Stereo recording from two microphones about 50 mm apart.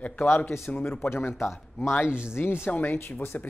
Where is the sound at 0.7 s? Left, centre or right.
Left.